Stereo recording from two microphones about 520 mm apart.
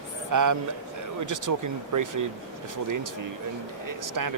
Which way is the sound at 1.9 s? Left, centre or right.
Right.